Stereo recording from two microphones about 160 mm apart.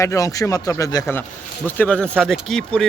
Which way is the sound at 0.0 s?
20° left (ahead or behind).